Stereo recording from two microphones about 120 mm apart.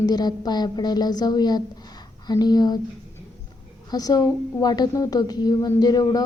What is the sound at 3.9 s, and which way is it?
A woman's voice, 30° left (ahead or behind).